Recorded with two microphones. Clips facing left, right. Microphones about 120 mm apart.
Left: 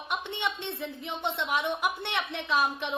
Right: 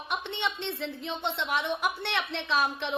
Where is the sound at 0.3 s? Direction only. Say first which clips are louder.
Right 1 dB; 15° left (ahead or behind).